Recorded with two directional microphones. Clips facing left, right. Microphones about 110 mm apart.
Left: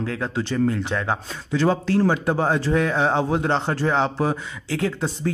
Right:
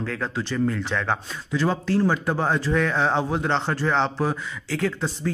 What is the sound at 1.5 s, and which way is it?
Speech, 25° left (ahead or behind).